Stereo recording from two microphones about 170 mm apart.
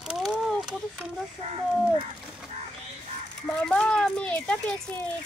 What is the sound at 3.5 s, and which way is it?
Speech, 5° left (ahead or behind).